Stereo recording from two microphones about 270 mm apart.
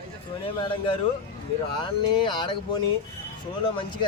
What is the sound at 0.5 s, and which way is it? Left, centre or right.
Speech, centre.